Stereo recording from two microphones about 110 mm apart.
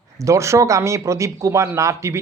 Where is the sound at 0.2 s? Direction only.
30° right (ahead or behind).